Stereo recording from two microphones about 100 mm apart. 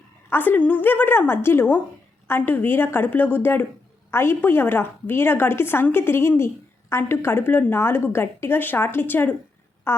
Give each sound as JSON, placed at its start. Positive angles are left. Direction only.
{"t": 0.3, "sound": "a woman's voice", "side_deg": 20}